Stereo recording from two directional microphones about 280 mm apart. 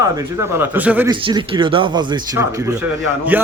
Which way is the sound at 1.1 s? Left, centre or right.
Centre.